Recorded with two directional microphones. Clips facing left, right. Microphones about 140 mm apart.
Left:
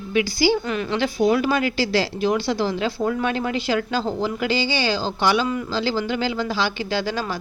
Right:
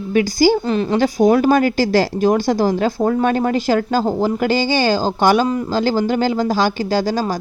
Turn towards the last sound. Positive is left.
turn(degrees=-40)  # may be behind; listen again after turning